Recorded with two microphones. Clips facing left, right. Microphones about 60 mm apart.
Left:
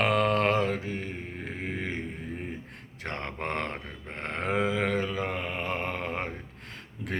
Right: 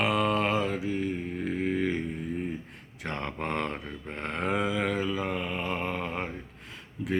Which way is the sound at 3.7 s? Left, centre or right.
Left.